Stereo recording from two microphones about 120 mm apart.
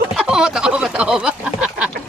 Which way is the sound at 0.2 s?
5° right (ahead or behind).